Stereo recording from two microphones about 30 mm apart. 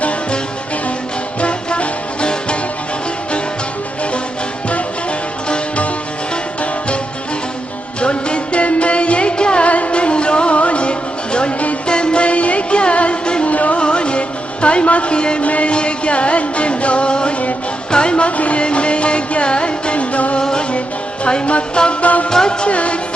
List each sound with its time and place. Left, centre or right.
1.4 s music: left
6.6 s music: left
8.0 s music: left
9.6 s music: left
13.8 s music: left
15.1 s music: left
15.4 s music: left
15.7 s music: left
18.3 s music: left
20.4 s music: left
22.0 s music: left
22.3 s music: left
22.6 s music: left